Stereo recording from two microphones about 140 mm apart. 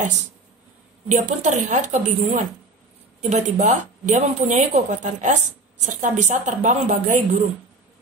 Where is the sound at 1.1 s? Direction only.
55° right (ahead or behind).